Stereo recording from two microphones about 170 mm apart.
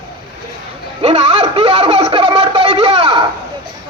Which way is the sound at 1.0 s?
35° right (ahead or behind).